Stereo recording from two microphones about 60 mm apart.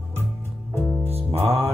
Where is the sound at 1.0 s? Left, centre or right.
Right.